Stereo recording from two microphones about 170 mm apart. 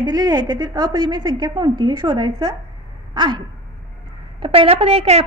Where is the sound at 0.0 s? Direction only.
25° right (ahead or behind).